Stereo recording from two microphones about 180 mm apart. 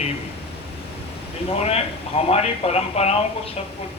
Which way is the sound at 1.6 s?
35° left (ahead or behind).